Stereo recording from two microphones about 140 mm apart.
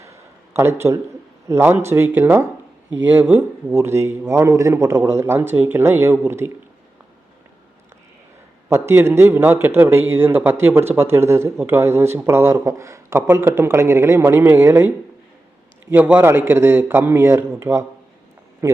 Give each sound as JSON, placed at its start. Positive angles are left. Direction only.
{"t": 0.5, "sound": "a man's voice", "side_deg": -20}
{"t": 8.7, "sound": "a man's voice", "side_deg": -20}